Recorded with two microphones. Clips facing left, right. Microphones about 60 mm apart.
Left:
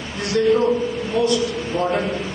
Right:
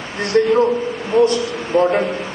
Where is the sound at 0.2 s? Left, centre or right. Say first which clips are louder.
Right 3 dB; right.